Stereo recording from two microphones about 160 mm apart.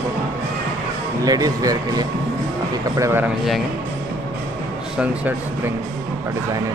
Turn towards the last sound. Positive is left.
turn(degrees=-10)  # may be behind; listen again after turning